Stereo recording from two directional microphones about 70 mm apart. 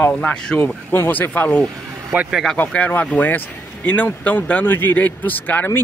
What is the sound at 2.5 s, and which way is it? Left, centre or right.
Speech, left.